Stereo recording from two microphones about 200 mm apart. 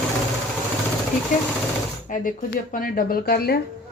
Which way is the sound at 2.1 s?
45° left (ahead or behind).